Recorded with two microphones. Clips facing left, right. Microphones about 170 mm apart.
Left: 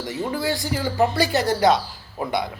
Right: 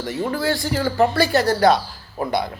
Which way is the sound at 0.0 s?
15° left (ahead or behind).